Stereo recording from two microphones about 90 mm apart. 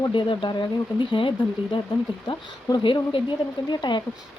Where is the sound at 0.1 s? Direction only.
65° left (ahead or behind).